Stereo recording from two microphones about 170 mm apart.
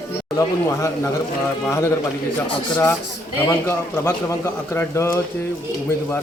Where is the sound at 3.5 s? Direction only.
15° left (ahead or behind).